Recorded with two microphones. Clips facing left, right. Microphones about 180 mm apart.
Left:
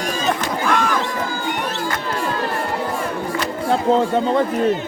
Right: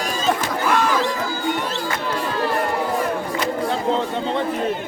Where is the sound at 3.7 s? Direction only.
45° left (ahead or behind).